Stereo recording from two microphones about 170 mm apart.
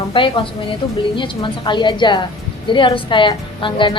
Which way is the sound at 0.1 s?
30° left (ahead or behind).